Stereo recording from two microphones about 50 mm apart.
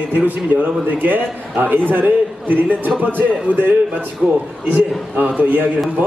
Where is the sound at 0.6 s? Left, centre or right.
Right.